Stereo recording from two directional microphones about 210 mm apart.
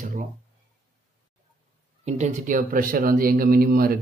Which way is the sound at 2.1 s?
35° right (ahead or behind).